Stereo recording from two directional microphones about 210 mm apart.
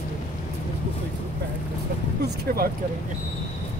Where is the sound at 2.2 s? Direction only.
45° right (ahead or behind).